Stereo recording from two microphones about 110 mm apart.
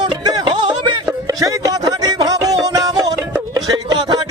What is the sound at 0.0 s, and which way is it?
Music, 40° right (ahead or behind).